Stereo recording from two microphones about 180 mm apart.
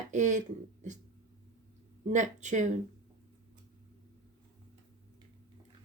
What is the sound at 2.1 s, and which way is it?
Speech, 45° right (ahead or behind).